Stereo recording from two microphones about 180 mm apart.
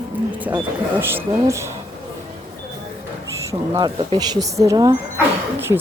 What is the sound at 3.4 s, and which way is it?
Speech, 15° right (ahead or behind).